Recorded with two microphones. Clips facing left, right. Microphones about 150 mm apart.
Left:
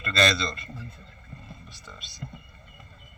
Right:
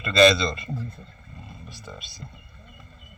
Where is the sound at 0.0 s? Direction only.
5° right (ahead or behind).